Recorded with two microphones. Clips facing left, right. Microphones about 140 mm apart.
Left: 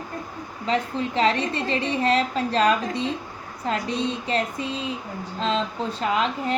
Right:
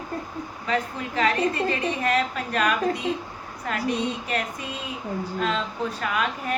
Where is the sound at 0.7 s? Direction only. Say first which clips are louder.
Left 3 dB; 25° left (ahead or behind).